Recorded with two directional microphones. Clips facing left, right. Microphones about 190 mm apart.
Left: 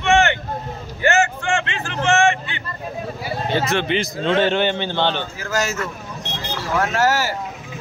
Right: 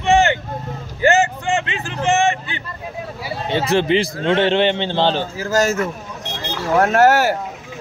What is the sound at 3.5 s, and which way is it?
A man's voice, 30° right (ahead or behind).